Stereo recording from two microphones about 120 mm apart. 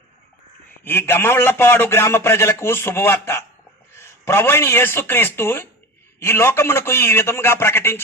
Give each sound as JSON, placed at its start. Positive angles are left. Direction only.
{"t": 0.9, "sound": "a man's voice", "side_deg": 20}